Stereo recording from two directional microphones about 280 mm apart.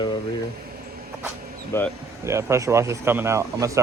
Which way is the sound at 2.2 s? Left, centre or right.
Centre.